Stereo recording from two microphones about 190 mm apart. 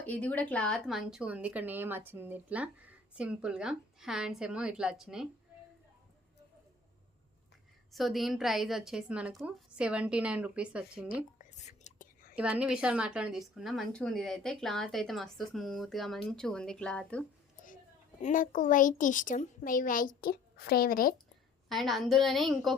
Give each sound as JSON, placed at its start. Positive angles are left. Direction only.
{"t": 0.0, "sound": "a woman's voice", "side_deg": 10}
{"t": 7.9, "sound": "a woman's voice", "side_deg": 0}
{"t": 11.3, "sound": "whispering", "side_deg": 40}
{"t": 12.4, "sound": "a woman's voice", "side_deg": -5}
{"t": 18.2, "sound": "a woman's voice", "side_deg": 45}
{"t": 21.7, "sound": "a woman's voice", "side_deg": 0}